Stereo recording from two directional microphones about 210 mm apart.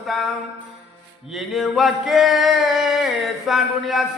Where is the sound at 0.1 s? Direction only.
Centre (ahead or behind).